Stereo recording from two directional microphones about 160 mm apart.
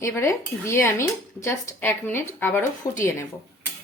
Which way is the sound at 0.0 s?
15° left (ahead or behind).